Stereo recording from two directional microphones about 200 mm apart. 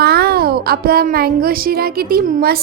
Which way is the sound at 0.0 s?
50° right (ahead or behind).